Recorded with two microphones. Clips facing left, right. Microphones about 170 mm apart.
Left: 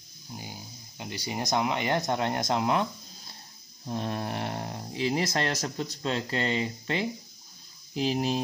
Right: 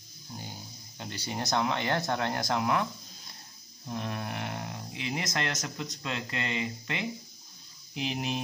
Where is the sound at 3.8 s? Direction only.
30° left (ahead or behind).